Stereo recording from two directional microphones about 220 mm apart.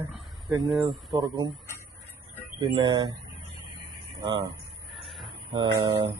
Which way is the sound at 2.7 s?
20° right (ahead or behind).